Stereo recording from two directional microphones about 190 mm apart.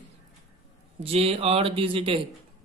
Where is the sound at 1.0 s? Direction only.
30° right (ahead or behind).